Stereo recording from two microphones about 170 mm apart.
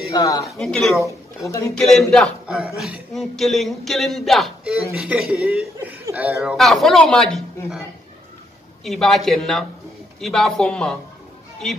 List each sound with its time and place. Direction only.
0.1 s a man's voice: 20° left (ahead or behind)
0.5 s speech: centre (ahead or behind)
0.9 s speech: 20° left (ahead or behind)
1.8 s a man's voice: centre (ahead or behind)
8.8 s speech: centre (ahead or behind)